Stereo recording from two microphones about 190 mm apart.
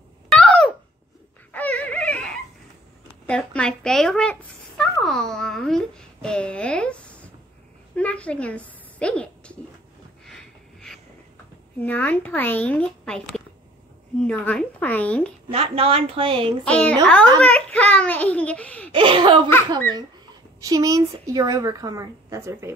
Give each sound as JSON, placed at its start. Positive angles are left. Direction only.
{"t": 0.3, "sound": "a sound", "side_deg": 5}
{"t": 3.3, "sound": "a woman's voice", "side_deg": 5}
{"t": 10.2, "sound": "a sound", "side_deg": 0}
{"t": 11.8, "sound": "speech", "side_deg": 10}
{"t": 14.2, "sound": "speech", "side_deg": 5}
{"t": 15.4, "sound": "a woman's voice", "side_deg": -30}
{"t": 16.6, "sound": "a child's voice", "side_deg": 5}
{"t": 18.9, "sound": "a woman's voice", "side_deg": -25}
{"t": 20.6, "sound": "a woman's voice", "side_deg": -20}